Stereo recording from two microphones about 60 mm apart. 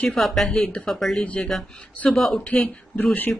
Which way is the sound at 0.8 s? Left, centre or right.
Centre.